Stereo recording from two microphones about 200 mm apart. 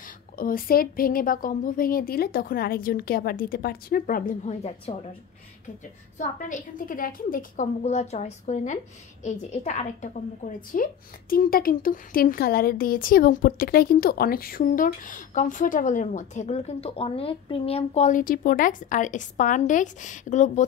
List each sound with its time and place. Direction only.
0.4 s a woman's voice: 45° left (ahead or behind)
6.1 s a woman's voice: 40° left (ahead or behind)